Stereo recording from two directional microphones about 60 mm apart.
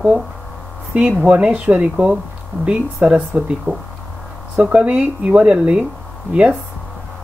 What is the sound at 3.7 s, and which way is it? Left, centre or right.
Speech, left.